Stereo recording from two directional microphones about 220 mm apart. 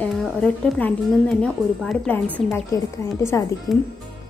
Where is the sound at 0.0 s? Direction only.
5° left (ahead or behind).